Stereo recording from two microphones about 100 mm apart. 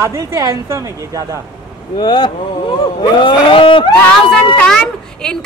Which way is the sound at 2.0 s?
50° left (ahead or behind).